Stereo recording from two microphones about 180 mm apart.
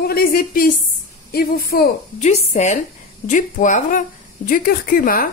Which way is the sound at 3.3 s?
45° left (ahead or behind).